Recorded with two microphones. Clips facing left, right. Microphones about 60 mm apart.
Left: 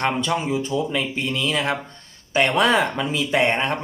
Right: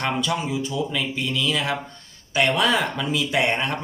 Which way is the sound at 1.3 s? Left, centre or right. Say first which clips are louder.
Left 1 dB; left.